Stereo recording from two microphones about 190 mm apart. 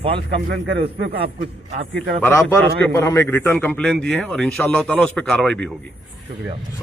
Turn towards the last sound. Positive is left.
turn(degrees=5)  # may be behind; listen again after turning